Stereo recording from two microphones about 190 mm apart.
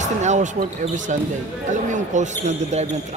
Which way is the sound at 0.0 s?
40° right (ahead or behind).